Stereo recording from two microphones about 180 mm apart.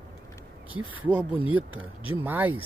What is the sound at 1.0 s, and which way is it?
Speech, 10° right (ahead or behind).